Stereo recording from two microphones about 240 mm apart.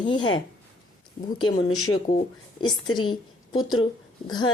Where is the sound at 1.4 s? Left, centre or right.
Left.